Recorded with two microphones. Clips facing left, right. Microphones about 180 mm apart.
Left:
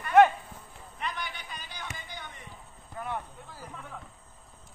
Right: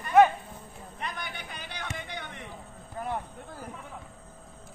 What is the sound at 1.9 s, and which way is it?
Basketball bounce, 65° right (ahead or behind).